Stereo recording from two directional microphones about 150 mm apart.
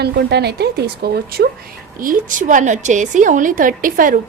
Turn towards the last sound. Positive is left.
turn(degrees=-65)  # may be behind; listen again after turning